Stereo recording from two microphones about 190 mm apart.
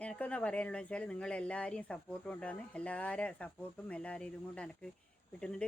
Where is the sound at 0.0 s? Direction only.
5° left (ahead or behind).